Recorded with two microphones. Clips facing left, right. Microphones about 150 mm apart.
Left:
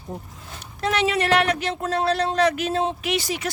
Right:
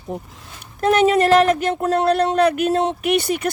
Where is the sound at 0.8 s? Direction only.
50° right (ahead or behind).